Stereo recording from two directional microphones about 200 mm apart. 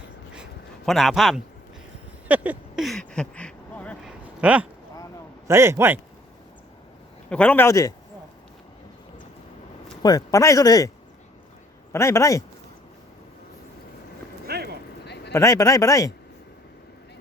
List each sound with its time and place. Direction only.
0.9 s a man's voice: centre (ahead or behind)
2.2 s a sound: 5° right (ahead or behind)
4.4 s a man's voice: 5° right (ahead or behind)
7.3 s speech: 5° left (ahead or behind)
10.0 s speech: 20° left (ahead or behind)
14.4 s clip-clop: 55° right (ahead or behind)
15.0 s a sound: 55° left (ahead or behind)
15.3 s speech: 15° left (ahead or behind)